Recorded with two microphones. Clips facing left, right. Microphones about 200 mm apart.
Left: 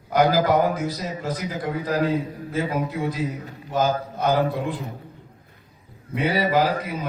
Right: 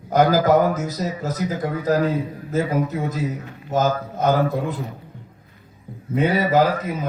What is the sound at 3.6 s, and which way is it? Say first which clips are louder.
A man's voice: right 2 dB; 45° right (ahead or behind).